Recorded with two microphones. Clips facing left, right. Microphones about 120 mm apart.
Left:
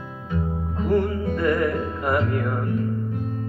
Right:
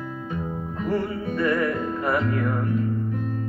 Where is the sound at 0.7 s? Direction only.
25° left (ahead or behind).